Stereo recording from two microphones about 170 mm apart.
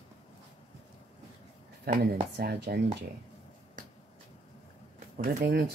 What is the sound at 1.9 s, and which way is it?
Speech, 65° right (ahead or behind).